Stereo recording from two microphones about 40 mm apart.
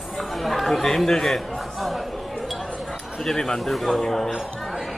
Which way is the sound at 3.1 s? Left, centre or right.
Centre.